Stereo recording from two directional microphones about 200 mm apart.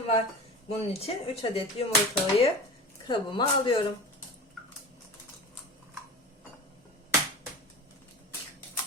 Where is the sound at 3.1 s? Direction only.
25° left (ahead or behind).